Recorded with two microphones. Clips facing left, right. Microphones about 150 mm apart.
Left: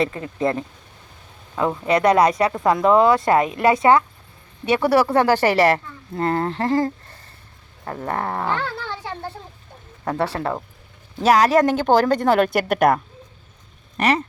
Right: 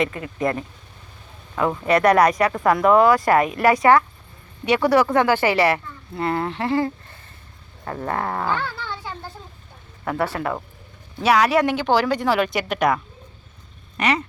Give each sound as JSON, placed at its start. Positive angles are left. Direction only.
{"t": 0.0, "sound": "speech", "side_deg": 30}
{"t": 8.0, "sound": "speech", "side_deg": 20}
{"t": 10.1, "sound": "speech", "side_deg": 30}
{"t": 11.2, "sound": "speech", "side_deg": 40}
{"t": 13.9, "sound": "speech", "side_deg": 40}